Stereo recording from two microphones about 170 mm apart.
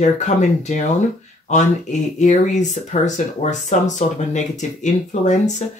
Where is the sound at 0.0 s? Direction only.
45° left (ahead or behind).